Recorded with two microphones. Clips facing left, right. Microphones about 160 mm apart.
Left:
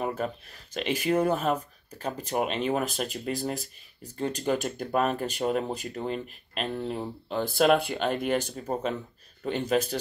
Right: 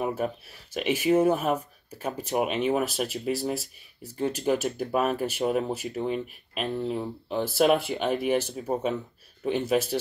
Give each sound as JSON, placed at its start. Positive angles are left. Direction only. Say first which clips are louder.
{"t": 0.0, "sound": "speech", "louder": "right 2 dB", "side_deg": -5}